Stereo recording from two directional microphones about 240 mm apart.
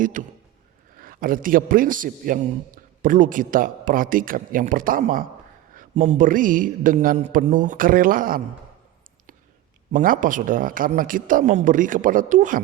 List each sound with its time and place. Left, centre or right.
0.0 s a man's voice: right
9.9 s a man's voice: right